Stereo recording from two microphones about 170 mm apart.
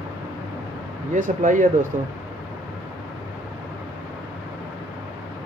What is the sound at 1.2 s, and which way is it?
Speech, 50° right (ahead or behind).